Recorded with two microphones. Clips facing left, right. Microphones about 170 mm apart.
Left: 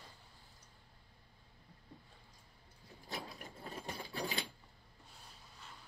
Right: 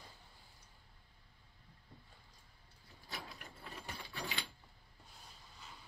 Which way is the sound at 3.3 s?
35° left (ahead or behind).